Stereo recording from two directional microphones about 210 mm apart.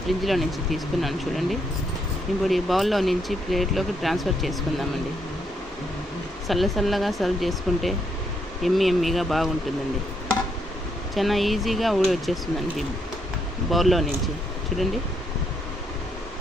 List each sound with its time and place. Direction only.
0.2 s speech: centre (ahead or behind)
6.5 s speech: centre (ahead or behind)
11.1 s speech: centre (ahead or behind)